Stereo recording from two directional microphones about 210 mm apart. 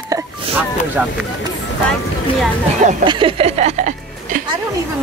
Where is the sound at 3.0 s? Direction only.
25° right (ahead or behind).